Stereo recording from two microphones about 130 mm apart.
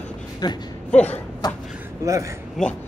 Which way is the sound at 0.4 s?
35° left (ahead or behind).